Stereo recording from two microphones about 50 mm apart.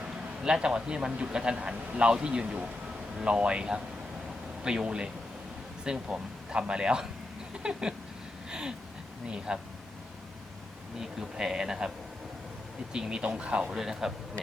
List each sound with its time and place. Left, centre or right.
0.5 s a man's voice: centre
7.5 s a sound: centre
8.4 s gasp: centre
9.2 s speech: centre
11.2 s a man's voice: centre
12.9 s speech: centre
13.7 s a man's voice: centre